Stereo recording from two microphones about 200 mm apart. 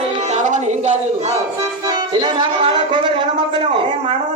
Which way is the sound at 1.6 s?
20° right (ahead or behind).